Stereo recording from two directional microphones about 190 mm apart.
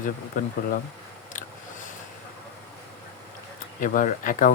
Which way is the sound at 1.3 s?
45° left (ahead or behind).